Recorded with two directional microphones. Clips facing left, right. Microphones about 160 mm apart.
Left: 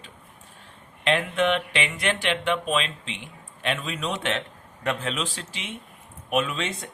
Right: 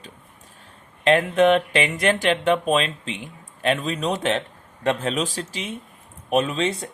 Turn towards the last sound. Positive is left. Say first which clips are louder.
# right 6 dB
turn(degrees=-35)  # may be behind; listen again after turning